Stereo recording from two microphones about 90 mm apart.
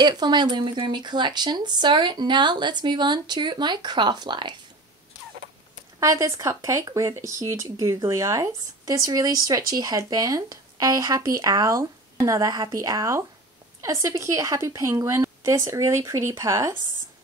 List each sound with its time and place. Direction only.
0.0 s speech: 50° right (ahead or behind)
5.9 s speech: 35° right (ahead or behind)